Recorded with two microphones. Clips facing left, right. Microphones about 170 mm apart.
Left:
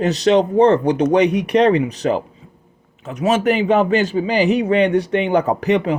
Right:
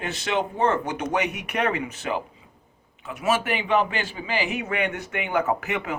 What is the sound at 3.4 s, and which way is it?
Speech, 40° left (ahead or behind).